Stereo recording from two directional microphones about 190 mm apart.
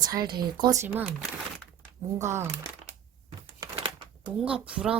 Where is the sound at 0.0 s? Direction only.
20° right (ahead or behind).